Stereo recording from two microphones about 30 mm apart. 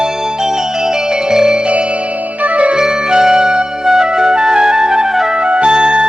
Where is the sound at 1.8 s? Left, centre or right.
Right.